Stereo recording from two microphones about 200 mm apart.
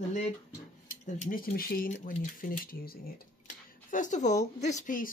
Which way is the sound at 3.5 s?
40° left (ahead or behind).